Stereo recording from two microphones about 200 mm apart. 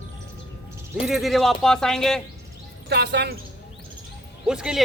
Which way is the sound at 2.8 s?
55° right (ahead or behind).